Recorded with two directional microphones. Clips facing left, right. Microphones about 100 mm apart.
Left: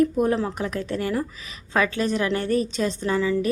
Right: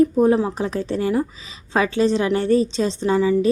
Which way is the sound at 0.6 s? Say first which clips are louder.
Right 4 dB; 25° right (ahead or behind).